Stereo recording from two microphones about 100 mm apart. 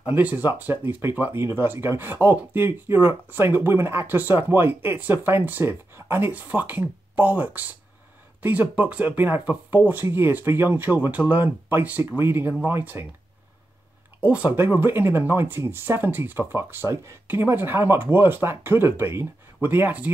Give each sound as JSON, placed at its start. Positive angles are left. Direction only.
{"t": 0.0, "sound": "speech", "side_deg": -15}
{"t": 14.2, "sound": "speech", "side_deg": -15}